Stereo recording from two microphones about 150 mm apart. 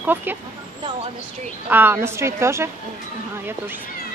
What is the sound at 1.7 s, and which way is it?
Speech, 15° right (ahead or behind).